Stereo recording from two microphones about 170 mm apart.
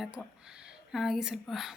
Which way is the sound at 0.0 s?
Centre (ahead or behind).